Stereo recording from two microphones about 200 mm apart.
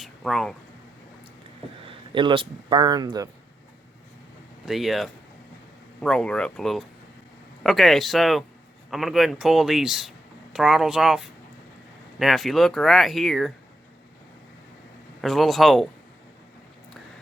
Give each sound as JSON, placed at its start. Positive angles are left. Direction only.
{"t": 0.0, "sound": "a sound", "side_deg": 0}
{"t": 1.9, "sound": "speech", "side_deg": -25}
{"t": 4.6, "sound": "speech", "side_deg": 0}
{"t": 15.2, "sound": "speech", "side_deg": 0}